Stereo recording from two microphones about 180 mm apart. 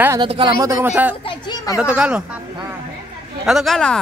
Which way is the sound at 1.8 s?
5° right (ahead or behind).